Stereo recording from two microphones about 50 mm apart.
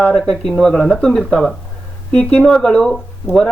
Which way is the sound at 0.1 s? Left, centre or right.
Centre.